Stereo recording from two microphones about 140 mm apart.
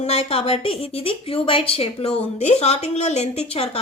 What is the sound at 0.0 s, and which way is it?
Speech, 45° left (ahead or behind).